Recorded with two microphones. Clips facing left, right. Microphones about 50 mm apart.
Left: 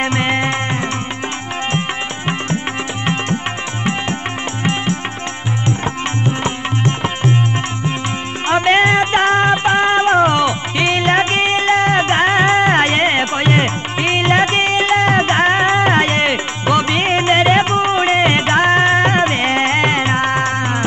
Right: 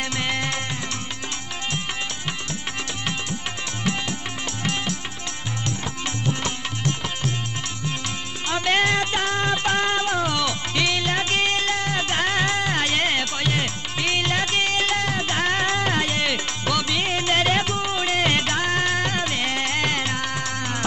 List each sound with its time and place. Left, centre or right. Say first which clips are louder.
0.0 s music: left 9 dB; left
6.2 s music: left 6 dB; left